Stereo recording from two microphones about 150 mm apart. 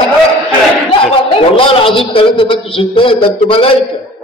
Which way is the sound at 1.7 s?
35° left (ahead or behind).